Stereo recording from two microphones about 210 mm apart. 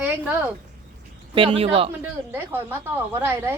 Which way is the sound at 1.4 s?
25° right (ahead or behind).